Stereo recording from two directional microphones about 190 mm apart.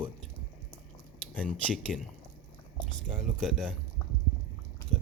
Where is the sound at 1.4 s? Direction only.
5° left (ahead or behind).